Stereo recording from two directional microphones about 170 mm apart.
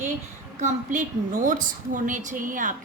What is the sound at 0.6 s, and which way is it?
A woman's voice, 50° right (ahead or behind).